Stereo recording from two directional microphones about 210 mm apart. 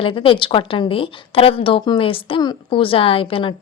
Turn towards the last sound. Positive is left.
turn(degrees=25)  # may be behind; listen again after turning